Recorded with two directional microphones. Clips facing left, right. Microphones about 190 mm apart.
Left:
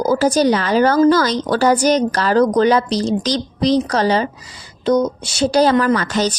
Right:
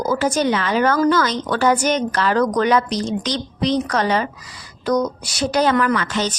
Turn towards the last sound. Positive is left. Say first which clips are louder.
# left 4 dB
turn(degrees=40)  # may be behind; listen again after turning